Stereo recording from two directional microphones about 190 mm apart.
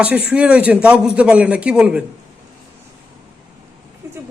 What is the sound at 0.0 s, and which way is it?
A man's voice, 10° right (ahead or behind).